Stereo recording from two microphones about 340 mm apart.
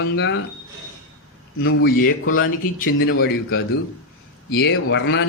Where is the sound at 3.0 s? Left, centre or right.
Left.